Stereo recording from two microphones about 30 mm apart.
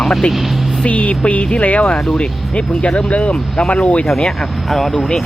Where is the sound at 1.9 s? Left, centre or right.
Left.